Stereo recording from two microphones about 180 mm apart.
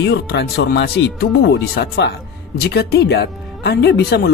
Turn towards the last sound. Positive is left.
turn(degrees=60)  # may be behind; listen again after turning